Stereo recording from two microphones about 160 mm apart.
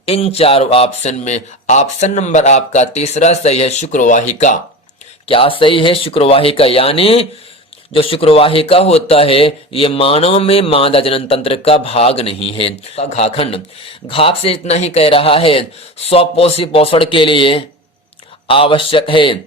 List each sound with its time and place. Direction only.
0.1 s a man's voice: 40° left (ahead or behind)
5.3 s a man's voice: 35° left (ahead or behind)